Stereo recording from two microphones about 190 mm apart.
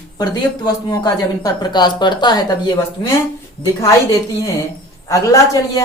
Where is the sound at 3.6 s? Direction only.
15° left (ahead or behind).